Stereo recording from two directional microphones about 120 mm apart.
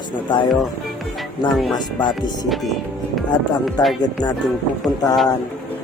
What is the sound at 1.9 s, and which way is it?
Speech, 40° left (ahead or behind).